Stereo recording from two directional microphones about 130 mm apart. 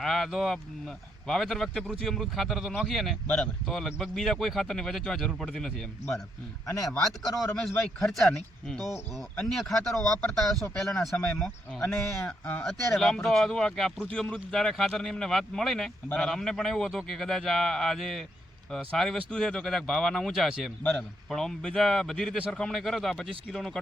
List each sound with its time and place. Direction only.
0.0 s a man's voice: centre (ahead or behind)
6.7 s speech: 25° left (ahead or behind)
7.2 s a man's voice: centre (ahead or behind)
11.8 s a man's voice: 20° left (ahead or behind)